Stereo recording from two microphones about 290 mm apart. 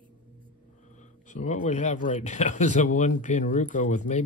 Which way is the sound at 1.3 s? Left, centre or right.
Left.